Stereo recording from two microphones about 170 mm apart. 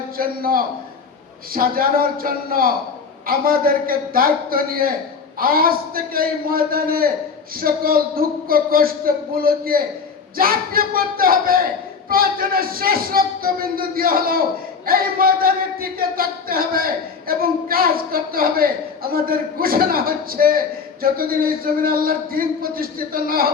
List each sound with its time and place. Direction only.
0.2 s speech: 60° right (ahead or behind)